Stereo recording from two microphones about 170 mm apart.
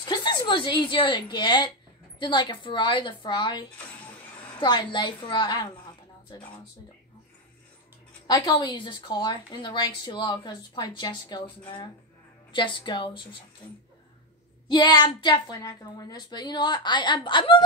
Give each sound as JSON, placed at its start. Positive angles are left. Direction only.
{"t": 0.0, "sound": "a woman's voice", "side_deg": 25}
{"t": 8.3, "sound": "speech", "side_deg": 25}
{"t": 14.7, "sound": "speech", "side_deg": 25}